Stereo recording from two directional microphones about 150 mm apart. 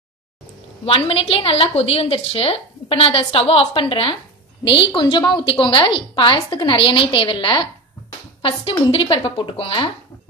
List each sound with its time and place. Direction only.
0.8 s a woman's voice: 35° left (ahead or behind)